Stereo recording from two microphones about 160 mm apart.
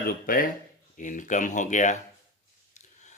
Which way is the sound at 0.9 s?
55° left (ahead or behind).